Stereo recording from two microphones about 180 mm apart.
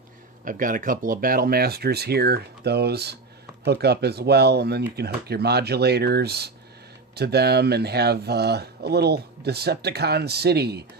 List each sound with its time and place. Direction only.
0.4 s speech: 50° right (ahead or behind)